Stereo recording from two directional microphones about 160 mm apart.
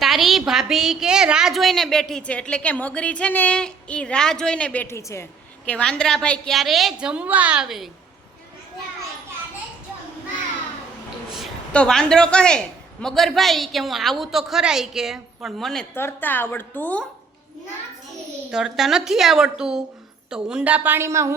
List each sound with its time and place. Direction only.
0.0 s a woman's voice: centre (ahead or behind); by 5.2 s 15° left (ahead or behind)
5.6 s a woman's voice: 5° left (ahead or behind)
11.3 s a woman's voice: 5° left (ahead or behind)
16.0 s a woman's voice: 15° left (ahead or behind)
18.5 s a woman's voice: 5° right (ahead or behind)